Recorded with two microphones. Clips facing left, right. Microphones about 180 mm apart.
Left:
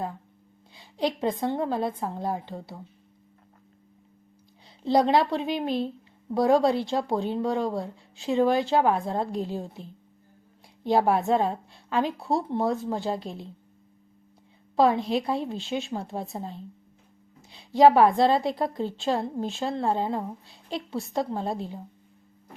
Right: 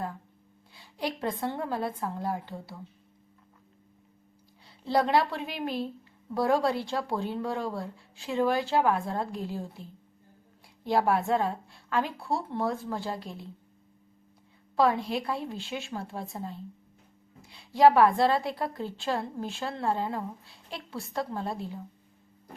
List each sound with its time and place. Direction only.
0.7 s a woman's voice: 20° left (ahead or behind)
4.8 s a woman's voice: 20° left (ahead or behind)
11.1 s a woman's voice: 25° left (ahead or behind)
14.8 s a woman's voice: 25° left (ahead or behind)